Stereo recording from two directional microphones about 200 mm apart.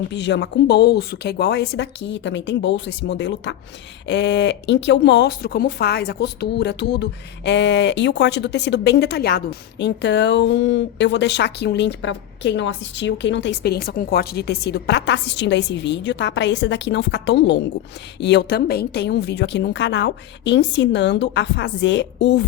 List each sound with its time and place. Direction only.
0.1 s speech: 60° left (ahead or behind)